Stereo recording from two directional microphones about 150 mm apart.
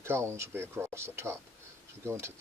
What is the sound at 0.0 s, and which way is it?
Speech, 15° right (ahead or behind).